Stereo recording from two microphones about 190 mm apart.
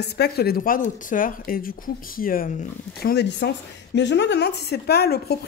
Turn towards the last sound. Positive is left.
turn(degrees=55)  # may be behind; listen again after turning